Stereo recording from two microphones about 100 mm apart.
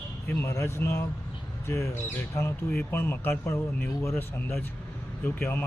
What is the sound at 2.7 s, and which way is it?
Speech, 20° left (ahead or behind).